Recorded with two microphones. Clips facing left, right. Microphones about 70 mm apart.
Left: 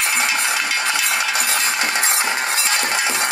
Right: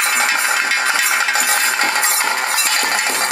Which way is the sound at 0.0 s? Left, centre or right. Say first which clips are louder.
Right 3 dB; right.